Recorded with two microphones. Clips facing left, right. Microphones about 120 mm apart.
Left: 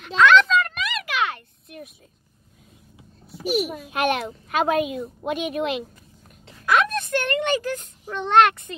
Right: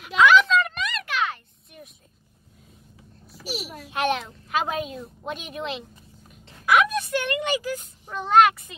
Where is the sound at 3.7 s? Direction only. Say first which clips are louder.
Left 2 dB; centre (ahead or behind).